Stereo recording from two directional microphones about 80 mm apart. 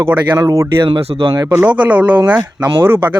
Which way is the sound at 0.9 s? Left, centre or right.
Right.